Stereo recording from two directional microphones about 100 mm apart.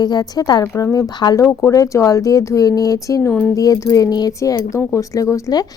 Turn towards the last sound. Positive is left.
turn(degrees=35)  # may be behind; listen again after turning